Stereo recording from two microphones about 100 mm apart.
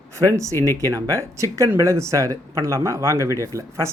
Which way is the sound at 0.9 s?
35° right (ahead or behind).